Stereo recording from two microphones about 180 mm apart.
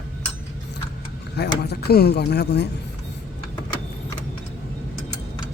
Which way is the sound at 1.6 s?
65° left (ahead or behind).